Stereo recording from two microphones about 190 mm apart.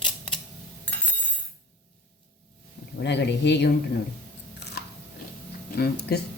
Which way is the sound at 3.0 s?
65° left (ahead or behind).